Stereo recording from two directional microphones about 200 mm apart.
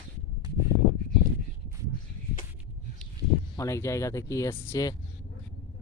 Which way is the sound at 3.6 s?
15° left (ahead or behind).